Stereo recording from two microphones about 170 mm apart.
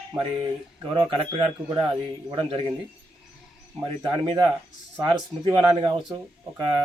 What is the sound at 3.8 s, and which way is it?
Speech, 25° right (ahead or behind).